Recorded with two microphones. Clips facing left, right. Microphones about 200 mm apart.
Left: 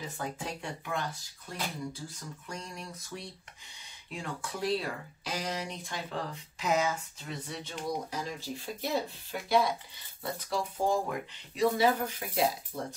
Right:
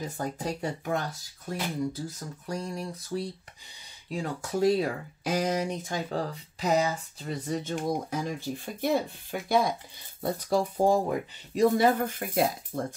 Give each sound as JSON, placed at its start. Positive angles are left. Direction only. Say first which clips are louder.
{"t": 0.0, "sound": "speech", "louder": "right 5 dB", "side_deg": -40}
{"t": 11.5, "sound": "speech", "louder": "right 4 dB", "side_deg": -50}